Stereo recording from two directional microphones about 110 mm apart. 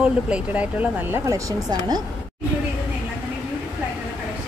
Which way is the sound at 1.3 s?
30° right (ahead or behind).